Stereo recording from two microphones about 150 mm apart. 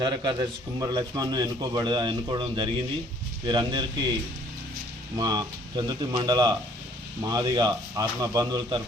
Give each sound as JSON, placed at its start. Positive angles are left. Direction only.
{"t": 0.0, "sound": "a man's voice", "side_deg": -30}
{"t": 5.1, "sound": "a man's voice", "side_deg": -25}